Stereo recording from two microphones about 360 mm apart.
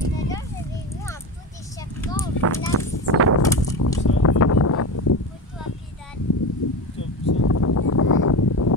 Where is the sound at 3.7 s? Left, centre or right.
Left.